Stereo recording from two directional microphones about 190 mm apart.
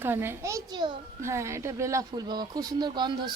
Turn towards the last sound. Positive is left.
turn(degrees=-25)  # may be behind; listen again after turning